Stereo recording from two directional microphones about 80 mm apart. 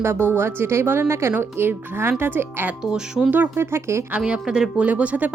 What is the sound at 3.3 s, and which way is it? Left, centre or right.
Speech, right.